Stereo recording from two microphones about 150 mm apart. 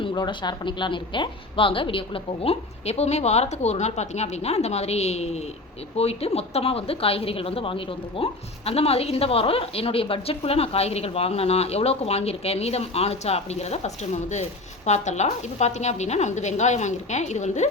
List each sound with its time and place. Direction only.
0.0 s speech: 30° left (ahead or behind); by 17.7 s 50° left (ahead or behind)